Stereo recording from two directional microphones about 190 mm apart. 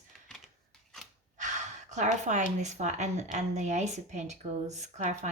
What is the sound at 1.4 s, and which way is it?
Speech, 40° right (ahead or behind).